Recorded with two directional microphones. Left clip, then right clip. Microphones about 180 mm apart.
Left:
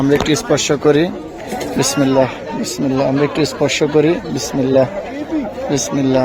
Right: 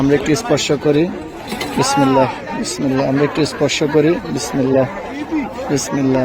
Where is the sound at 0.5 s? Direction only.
15° left (ahead or behind).